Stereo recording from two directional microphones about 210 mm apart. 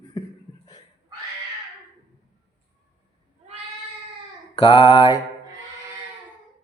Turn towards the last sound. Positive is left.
turn(degrees=25)  # may be behind; listen again after turning